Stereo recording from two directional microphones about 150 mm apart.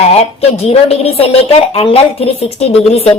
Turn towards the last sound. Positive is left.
turn(degrees=40)  # may be behind; listen again after turning